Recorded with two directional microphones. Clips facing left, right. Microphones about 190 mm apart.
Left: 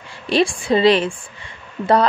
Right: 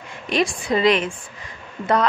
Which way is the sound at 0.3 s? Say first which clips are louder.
Left 4 dB; 30° left (ahead or behind).